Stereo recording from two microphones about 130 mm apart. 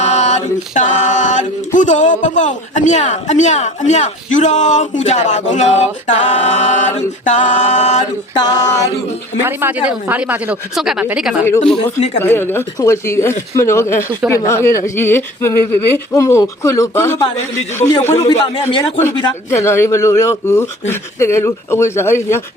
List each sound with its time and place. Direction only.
0.0 s a sound: 60° left (ahead or behind)
8.4 s speech: 30° left (ahead or behind)
9.4 s speech: 15° right (ahead or behind)
10.8 s speech: centre (ahead or behind)
12.2 s speech: 15° left (ahead or behind)
18.3 s speech: 40° left (ahead or behind)
19.5 s speech: 20° left (ahead or behind)